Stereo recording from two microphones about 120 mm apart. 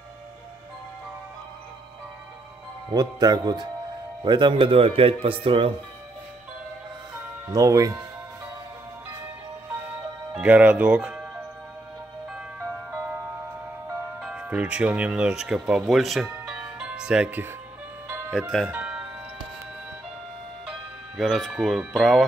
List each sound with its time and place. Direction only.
2.9 s a man's voice: 35° right (ahead or behind); by 5.7 s 50° right (ahead or behind)
7.5 s speech: 30° right (ahead or behind)
10.3 s speech: 10° right (ahead or behind)
12.5 s music: 20° right (ahead or behind)
14.2 s speech: 10° right (ahead or behind)
18.7 s music: 10° right (ahead or behind)
21.2 s speech: centre (ahead or behind)